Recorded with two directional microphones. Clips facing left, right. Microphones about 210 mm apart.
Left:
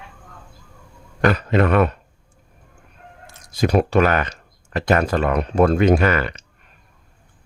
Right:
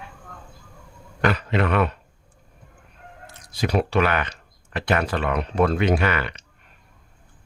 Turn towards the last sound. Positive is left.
turn(degrees=45)  # may be behind; listen again after turning